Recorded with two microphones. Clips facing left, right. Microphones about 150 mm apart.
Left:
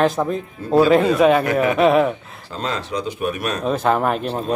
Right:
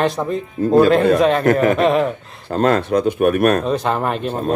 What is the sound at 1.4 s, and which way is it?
Speech, 45° right (ahead or behind).